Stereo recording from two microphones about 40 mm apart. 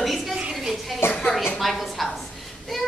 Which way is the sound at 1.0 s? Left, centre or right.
Left.